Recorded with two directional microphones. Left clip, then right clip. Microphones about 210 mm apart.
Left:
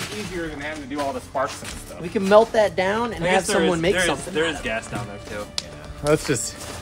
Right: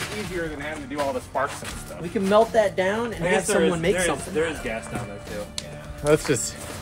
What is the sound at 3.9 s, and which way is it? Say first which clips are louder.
Speech: left 2 dB; 20° left (ahead or behind).